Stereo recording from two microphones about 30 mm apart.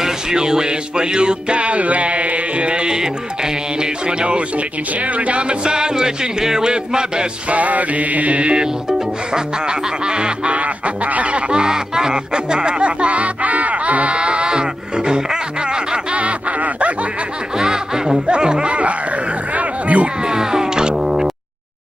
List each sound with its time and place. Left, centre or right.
0.0 s music: right
5.0 s goose: right
5.7 s music: right
7.4 s mantra: right
9.3 s music: right
10.5 s goose: right
11.3 s speech: right
14.1 s music: right
16.1 s music: right
17.6 s music: right
19.5 s a sound: right
20.2 s music: right